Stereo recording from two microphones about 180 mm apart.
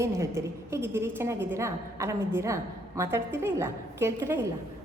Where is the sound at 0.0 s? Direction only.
15° right (ahead or behind).